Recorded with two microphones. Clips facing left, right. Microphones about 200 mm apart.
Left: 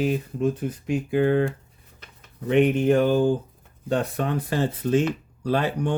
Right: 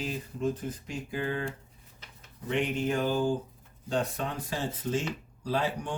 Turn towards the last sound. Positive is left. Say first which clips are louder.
# left 7 dB
turn(degrees=65)  # may be behind; listen again after turning